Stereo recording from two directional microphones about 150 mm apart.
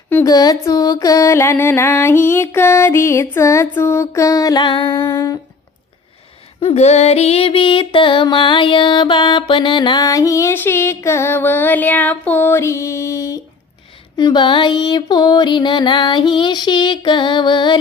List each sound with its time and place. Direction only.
0.3 s music: 25° left (ahead or behind)
6.6 s music: 40° left (ahead or behind)